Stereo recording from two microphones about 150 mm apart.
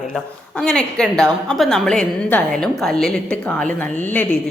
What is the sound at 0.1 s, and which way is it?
A woman's voice, 5° left (ahead or behind).